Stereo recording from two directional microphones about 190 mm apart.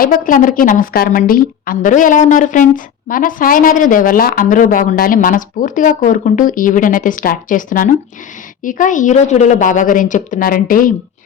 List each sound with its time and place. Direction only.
0.0 s a woman's voice: 45° left (ahead or behind)